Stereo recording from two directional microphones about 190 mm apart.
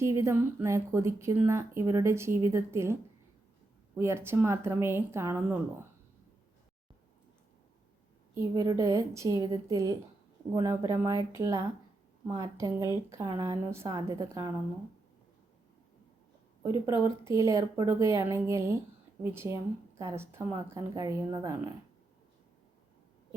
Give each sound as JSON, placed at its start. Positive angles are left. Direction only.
{"t": 0.0, "sound": "speech", "side_deg": -15}
{"t": 8.4, "sound": "speech", "side_deg": -15}
{"t": 17.0, "sound": "speech", "side_deg": -15}